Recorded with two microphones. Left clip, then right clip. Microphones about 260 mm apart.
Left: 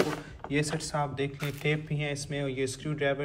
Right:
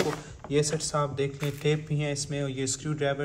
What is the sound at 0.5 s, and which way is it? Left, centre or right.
A man's voice, centre.